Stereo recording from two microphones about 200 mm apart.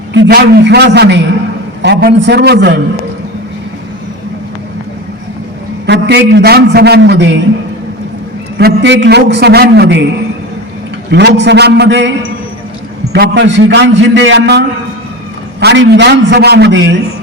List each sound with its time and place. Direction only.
0.1 s a man's voice: 60° right (ahead or behind)
5.8 s a man's voice: 55° right (ahead or behind)
8.5 s a man's voice: 60° right (ahead or behind)
11.1 s a man's voice: 60° right (ahead or behind)
13.1 s a man's voice: 60° right (ahead or behind)
15.6 s a man's voice: 60° right (ahead or behind)